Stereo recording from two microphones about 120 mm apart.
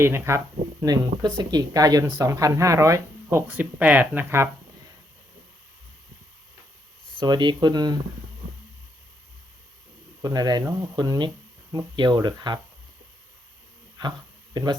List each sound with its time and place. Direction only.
0.0 s speech: 20° right (ahead or behind)
7.2 s speech: 40° right (ahead or behind)
10.2 s speech: 30° right (ahead or behind)
14.0 s speech: 35° right (ahead or behind)